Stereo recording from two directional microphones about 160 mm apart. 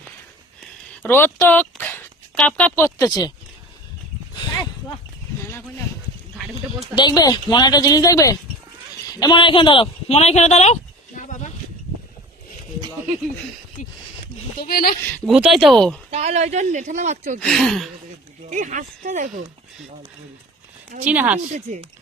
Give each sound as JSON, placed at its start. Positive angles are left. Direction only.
{"t": 1.0, "sound": "speech", "side_deg": 10}
{"t": 4.4, "sound": "a sound", "side_deg": 25}
{"t": 6.3, "sound": "sheep", "side_deg": 0}
{"t": 7.0, "sound": "a woman's voice", "side_deg": 25}
{"t": 14.6, "sound": "speech", "side_deg": 70}
{"t": 15.0, "sound": "speech", "side_deg": 5}
{"t": 16.1, "sound": "speech", "side_deg": -40}
{"t": 17.4, "sound": "speech", "side_deg": 5}
{"t": 18.5, "sound": "speech", "side_deg": -50}
{"t": 21.0, "sound": "speech", "side_deg": -10}
{"t": 21.5, "sound": "speech", "side_deg": -50}